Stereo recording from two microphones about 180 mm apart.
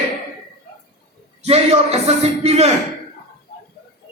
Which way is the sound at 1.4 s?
35° right (ahead or behind).